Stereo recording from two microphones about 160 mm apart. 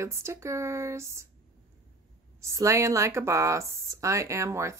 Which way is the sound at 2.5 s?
20° right (ahead or behind).